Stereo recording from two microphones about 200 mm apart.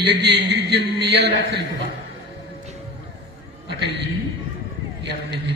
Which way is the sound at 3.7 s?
55° right (ahead or behind).